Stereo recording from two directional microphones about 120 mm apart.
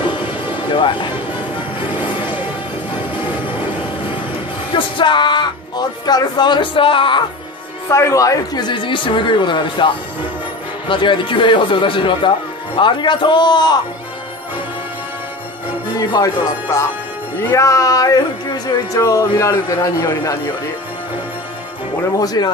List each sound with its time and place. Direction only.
0.7 s speech: 40° left (ahead or behind)
4.7 s speech: 40° left (ahead or behind)
7.9 s speech: 25° left (ahead or behind); by 9.8 s 40° left (ahead or behind)
10.9 s speech: 45° left (ahead or behind)
16.0 s speech: 35° left (ahead or behind)
16.7 s speech: 25° left (ahead or behind)
22.2 s speech: 35° left (ahead or behind)